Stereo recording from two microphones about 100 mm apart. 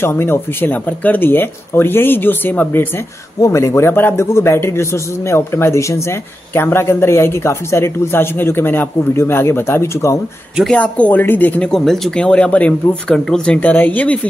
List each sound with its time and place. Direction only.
0.0 s a man's voice: 25° left (ahead or behind)
3.4 s a man's voice: 30° left (ahead or behind)
10.7 s speech: 15° left (ahead or behind)
11.7 s speech: 5° left (ahead or behind)